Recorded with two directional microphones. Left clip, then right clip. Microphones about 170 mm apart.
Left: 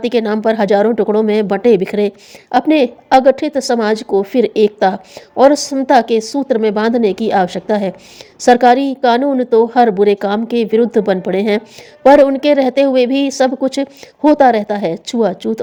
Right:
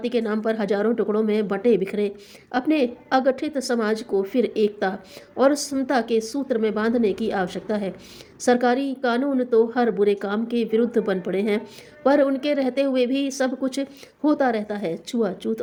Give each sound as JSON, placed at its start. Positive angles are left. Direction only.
{"t": 0.0, "sound": "speech", "side_deg": 50}